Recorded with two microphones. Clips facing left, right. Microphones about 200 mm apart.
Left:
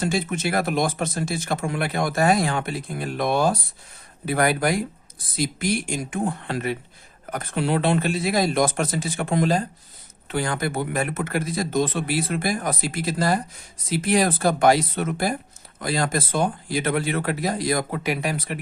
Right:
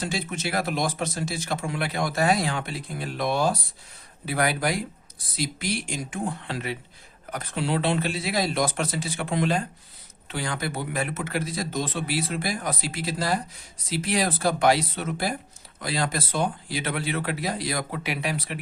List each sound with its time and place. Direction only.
0.0 s speech: 50° left (ahead or behind)
10.2 s speech: 50° left (ahead or behind)